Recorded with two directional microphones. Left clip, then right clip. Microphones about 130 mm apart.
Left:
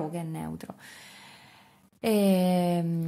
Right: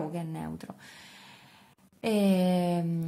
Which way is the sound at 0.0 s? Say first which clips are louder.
Left 1 dB; 20° left (ahead or behind).